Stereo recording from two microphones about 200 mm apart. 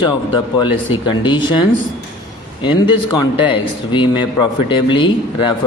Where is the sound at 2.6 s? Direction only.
25° left (ahead or behind).